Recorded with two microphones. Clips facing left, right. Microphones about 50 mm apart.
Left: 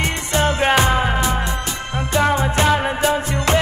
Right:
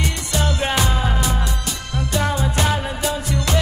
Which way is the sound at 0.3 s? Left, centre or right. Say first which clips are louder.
Left 6 dB; left.